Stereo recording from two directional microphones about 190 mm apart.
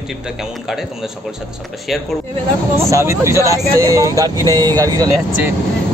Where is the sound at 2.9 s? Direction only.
15° right (ahead or behind).